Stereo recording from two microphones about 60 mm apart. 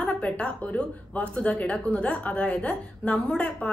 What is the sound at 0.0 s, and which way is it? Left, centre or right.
Speech, left.